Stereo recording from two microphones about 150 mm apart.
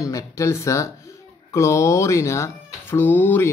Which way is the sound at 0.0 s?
20° left (ahead or behind).